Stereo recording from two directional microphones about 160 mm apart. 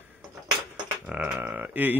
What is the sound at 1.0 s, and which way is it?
Speech, 5° right (ahead or behind).